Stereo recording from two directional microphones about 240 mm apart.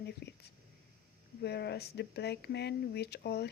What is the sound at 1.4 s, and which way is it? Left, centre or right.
Speech, left.